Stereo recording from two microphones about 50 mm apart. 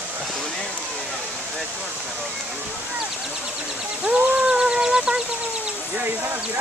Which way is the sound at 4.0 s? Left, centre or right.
Right.